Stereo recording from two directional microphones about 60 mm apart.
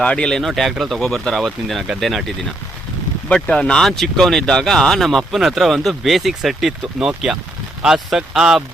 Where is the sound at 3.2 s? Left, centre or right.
Centre.